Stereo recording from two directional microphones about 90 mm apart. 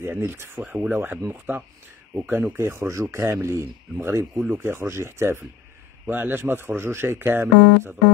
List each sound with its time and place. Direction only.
0.0 s speech: 25° right (ahead or behind)